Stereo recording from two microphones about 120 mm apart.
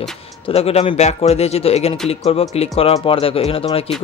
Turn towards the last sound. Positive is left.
turn(degrees=55)  # may be behind; listen again after turning